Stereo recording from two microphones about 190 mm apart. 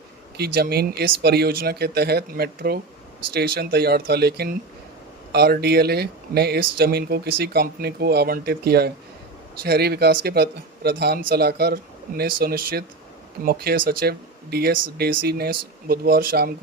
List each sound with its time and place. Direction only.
0.3 s speech: 55° right (ahead or behind)